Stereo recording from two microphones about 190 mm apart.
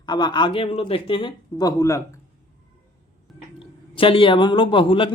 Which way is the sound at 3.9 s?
30° left (ahead or behind).